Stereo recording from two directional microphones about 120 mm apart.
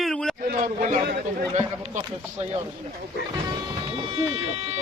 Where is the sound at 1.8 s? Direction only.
60° right (ahead or behind).